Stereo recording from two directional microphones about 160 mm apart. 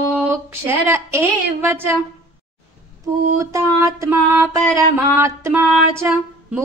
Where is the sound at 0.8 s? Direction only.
15° right (ahead or behind).